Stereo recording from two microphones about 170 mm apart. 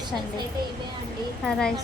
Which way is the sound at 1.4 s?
5° left (ahead or behind).